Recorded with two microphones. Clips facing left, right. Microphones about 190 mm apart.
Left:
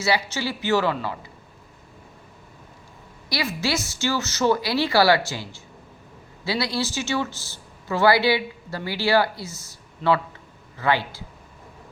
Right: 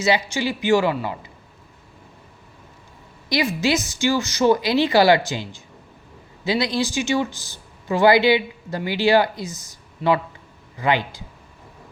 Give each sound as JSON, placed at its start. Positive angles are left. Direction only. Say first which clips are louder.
{"t": 0.0, "sound": "speech", "louder": "right 3 dB", "side_deg": -15}
{"t": 3.2, "sound": "speech", "louder": "right 5 dB", "side_deg": -20}